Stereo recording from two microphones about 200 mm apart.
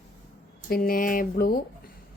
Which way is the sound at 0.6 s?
45° left (ahead or behind).